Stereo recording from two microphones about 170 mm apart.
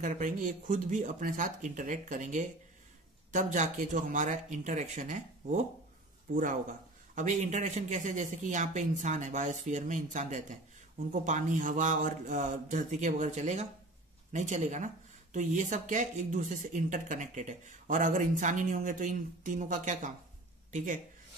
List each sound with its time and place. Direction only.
0.0 s a man's voice: 50° right (ahead or behind)